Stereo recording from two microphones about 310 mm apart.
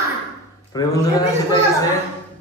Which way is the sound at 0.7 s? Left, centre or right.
Centre.